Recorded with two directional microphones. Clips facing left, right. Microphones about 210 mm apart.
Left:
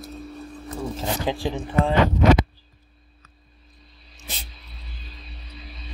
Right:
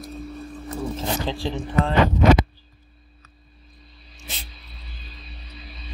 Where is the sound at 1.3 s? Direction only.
15° left (ahead or behind).